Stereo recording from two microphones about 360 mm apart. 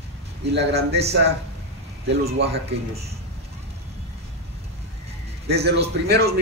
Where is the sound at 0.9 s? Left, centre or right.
Right.